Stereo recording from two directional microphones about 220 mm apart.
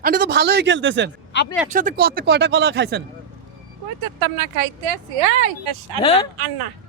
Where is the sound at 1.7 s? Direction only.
35° right (ahead or behind).